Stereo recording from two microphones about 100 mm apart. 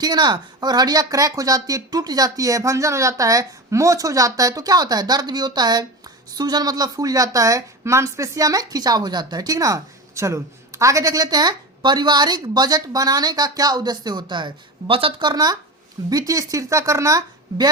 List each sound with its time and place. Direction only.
0.0 s a woman's voice: 45° right (ahead or behind); by 15.1 s 65° right (ahead or behind)
15.2 s a woman's voice: 40° right (ahead or behind)